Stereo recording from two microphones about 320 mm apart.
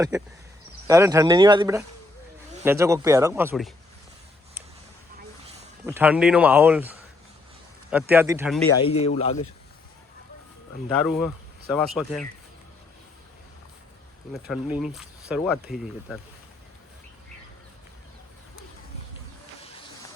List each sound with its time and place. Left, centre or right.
0.9 s speech: centre
5.8 s speech: centre
8.8 s a man's voice: centre
10.8 s speech: centre
14.3 s speech: centre